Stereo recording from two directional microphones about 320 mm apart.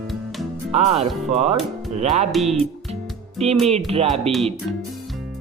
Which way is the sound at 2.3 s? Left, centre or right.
Centre.